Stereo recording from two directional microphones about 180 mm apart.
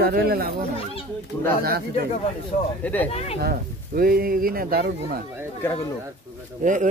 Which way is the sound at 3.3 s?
55° right (ahead or behind).